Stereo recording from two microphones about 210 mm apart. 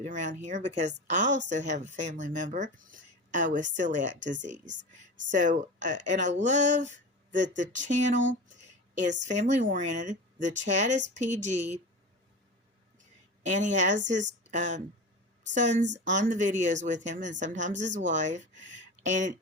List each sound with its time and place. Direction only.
0.0 s a woman's voice: 35° right (ahead or behind)
8.2 s speech: 60° right (ahead or behind)
9.2 s a woman's voice: 35° right (ahead or behind)
13.4 s a woman's voice: 35° right (ahead or behind)